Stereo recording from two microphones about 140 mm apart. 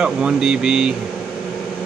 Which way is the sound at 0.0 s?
5° right (ahead or behind).